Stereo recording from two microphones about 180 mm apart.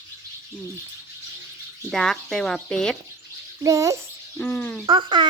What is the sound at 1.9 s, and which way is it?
Speech, 5° left (ahead or behind).